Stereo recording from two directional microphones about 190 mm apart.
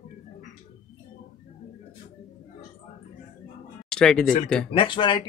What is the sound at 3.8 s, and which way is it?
Speech, 5° left (ahead or behind).